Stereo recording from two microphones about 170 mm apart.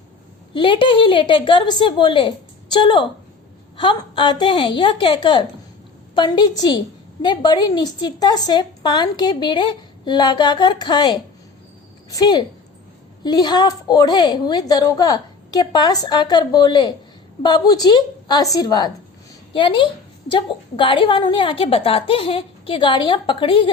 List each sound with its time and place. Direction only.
0.5 s a woman's voice: 30° left (ahead or behind)